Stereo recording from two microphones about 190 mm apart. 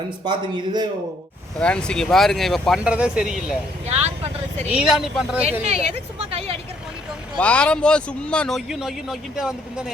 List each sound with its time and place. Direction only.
0.3 s a man's voice: 25° right (ahead or behind)
1.5 s speech: 5° left (ahead or behind)
4.7 s speech: 5° right (ahead or behind)
5.5 s a woman's voice: 35° right (ahead or behind)
7.3 s speech: 5° left (ahead or behind)